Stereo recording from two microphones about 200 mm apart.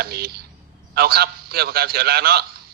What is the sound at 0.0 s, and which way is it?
A man's voice, 50° right (ahead or behind).